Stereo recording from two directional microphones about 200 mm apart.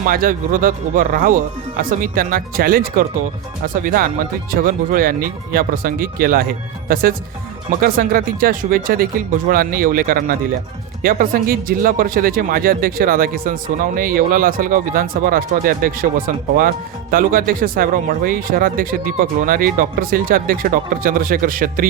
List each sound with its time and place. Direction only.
0.0 s speech: 45° right (ahead or behind)